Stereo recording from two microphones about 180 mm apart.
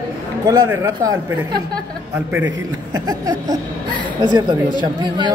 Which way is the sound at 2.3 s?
15° right (ahead or behind).